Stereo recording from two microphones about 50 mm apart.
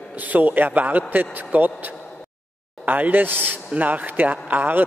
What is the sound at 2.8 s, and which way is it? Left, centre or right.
A man's voice, right.